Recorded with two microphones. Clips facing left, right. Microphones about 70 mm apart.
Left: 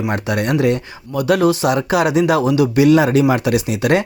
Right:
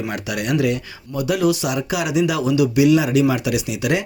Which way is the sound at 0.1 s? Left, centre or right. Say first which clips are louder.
Left 5 dB; left.